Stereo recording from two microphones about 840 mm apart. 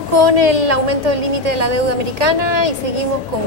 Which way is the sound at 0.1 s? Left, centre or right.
Right.